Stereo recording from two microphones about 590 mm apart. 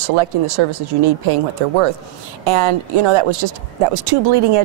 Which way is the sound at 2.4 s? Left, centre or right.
Right.